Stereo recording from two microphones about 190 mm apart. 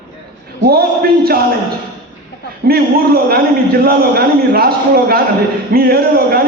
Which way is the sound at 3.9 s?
55° right (ahead or behind).